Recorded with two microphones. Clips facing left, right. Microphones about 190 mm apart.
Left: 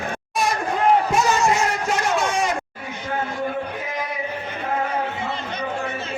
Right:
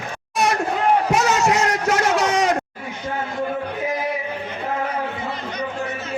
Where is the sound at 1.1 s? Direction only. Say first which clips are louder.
Right 1 dB; 70° right (ahead or behind).